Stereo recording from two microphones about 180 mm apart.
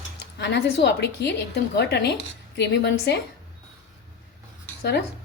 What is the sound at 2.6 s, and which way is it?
Speech, 70° left (ahead or behind).